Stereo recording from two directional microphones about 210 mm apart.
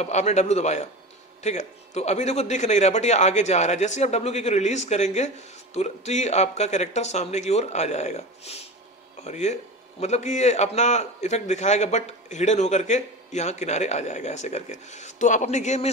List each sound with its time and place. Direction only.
0.0 s speech: 35° left (ahead or behind)